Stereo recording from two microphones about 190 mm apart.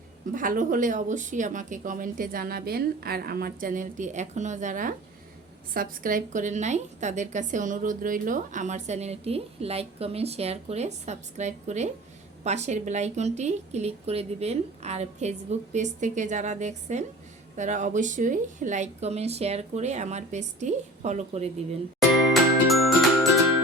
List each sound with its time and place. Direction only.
0.3 s a woman's voice: 45° right (ahead or behind)
22.3 s jingle: centre (ahead or behind)